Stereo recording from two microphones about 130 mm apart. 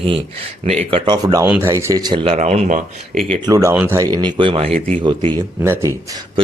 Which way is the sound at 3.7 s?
10° right (ahead or behind).